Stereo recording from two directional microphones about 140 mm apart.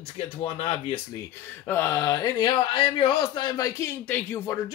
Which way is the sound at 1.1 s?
20° left (ahead or behind).